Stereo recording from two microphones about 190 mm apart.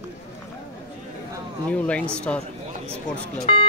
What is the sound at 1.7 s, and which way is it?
Speech, 5° left (ahead or behind).